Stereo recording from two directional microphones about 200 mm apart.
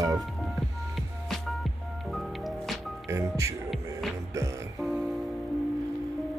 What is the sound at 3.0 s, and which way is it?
Speech, 15° right (ahead or behind).